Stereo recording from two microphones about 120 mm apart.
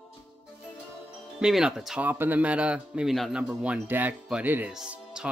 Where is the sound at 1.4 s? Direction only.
5° right (ahead or behind).